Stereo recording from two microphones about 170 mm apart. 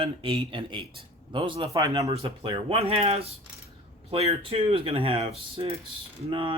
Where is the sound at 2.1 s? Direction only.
35° right (ahead or behind).